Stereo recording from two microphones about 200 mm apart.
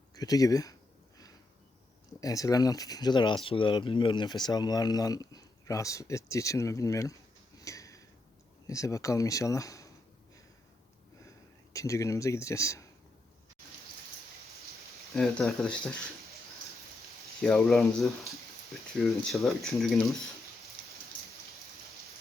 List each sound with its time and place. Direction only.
0.1 s speech: 20° left (ahead or behind)
2.2 s speech: 15° left (ahead or behind)
7.6 s a sound: 15° left (ahead or behind)
8.6 s speech: 15° left (ahead or behind)
11.7 s speech: 15° left (ahead or behind)
15.1 s speech: centre (ahead or behind)
17.4 s speech: centre (ahead or behind)